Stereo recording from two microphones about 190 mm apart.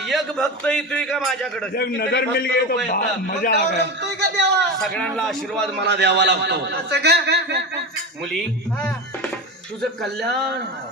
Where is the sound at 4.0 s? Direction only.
65° right (ahead or behind).